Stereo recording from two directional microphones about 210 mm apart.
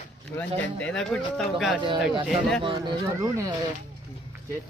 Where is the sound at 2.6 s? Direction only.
20° right (ahead or behind).